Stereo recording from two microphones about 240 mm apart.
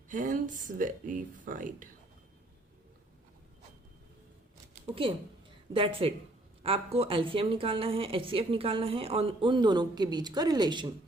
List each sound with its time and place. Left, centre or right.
0.1 s speech: right
5.7 s a woman's voice: right